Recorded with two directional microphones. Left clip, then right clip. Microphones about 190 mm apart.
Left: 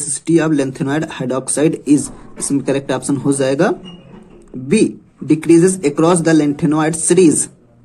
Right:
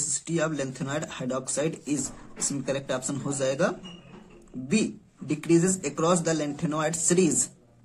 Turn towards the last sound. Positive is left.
turn(degrees=25)  # may be behind; listen again after turning